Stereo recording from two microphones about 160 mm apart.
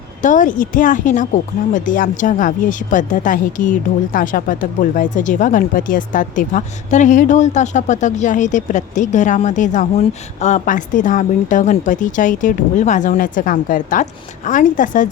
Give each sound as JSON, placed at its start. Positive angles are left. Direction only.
{"t": 0.2, "sound": "a woman's voice", "side_deg": 55}